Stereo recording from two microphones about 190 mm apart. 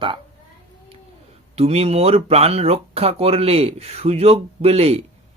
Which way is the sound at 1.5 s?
35° right (ahead or behind).